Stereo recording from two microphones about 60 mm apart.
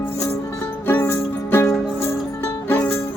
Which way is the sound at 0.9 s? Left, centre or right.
Left.